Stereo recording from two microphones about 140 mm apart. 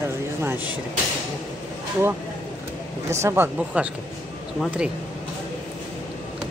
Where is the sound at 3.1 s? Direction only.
20° right (ahead or behind).